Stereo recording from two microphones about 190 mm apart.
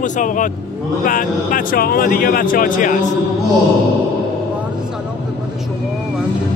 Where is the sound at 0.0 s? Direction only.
45° left (ahead or behind).